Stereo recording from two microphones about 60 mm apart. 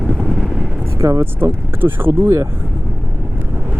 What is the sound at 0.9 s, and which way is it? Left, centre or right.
Speech, right.